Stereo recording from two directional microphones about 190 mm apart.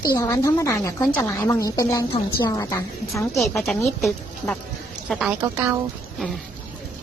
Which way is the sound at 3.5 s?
Centre (ahead or behind).